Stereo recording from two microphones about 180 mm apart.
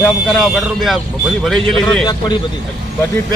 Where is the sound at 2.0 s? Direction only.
25° left (ahead or behind).